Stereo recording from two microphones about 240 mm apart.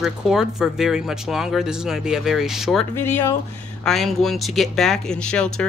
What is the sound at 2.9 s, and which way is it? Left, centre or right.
Speech, centre.